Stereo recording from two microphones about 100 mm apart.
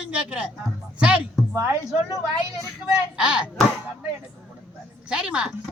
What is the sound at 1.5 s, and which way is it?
Speech, 25° right (ahead or behind).